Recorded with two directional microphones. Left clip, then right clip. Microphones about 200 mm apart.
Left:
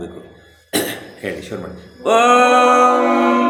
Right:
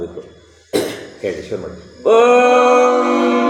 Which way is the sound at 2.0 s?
15° left (ahead or behind).